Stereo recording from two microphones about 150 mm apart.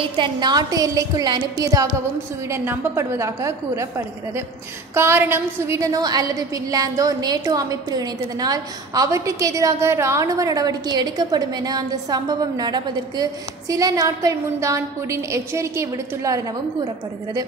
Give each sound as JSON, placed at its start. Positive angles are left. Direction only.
{"t": 0.0, "sound": "a woman's voice", "side_deg": -35}